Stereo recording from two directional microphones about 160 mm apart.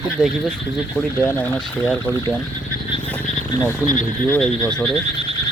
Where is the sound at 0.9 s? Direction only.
10° left (ahead or behind).